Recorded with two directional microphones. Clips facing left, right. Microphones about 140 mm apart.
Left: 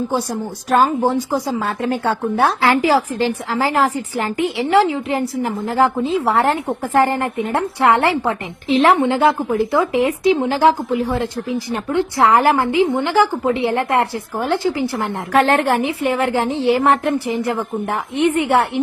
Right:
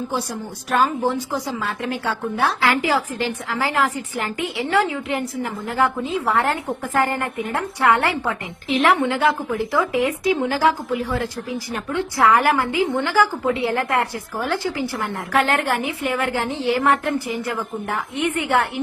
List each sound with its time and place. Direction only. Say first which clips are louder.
0.7 s a woman's voice: left 4 dB; 40° left (ahead or behind)
4.6 s a woman's voice: left 5 dB; 25° left (ahead or behind)
15.3 s a woman's voice: left 5 dB; 35° left (ahead or behind)
15.9 s a woman's voice: left 5 dB; 20° left (ahead or behind)